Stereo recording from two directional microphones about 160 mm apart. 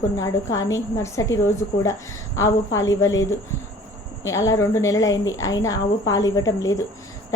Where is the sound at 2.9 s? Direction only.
20° left (ahead or behind).